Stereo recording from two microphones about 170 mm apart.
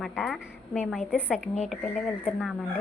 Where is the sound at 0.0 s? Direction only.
Centre (ahead or behind).